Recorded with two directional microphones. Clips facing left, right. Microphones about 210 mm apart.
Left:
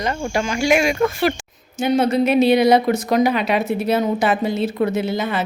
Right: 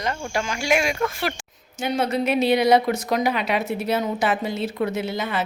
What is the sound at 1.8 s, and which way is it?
A woman's voice, 20° left (ahead or behind).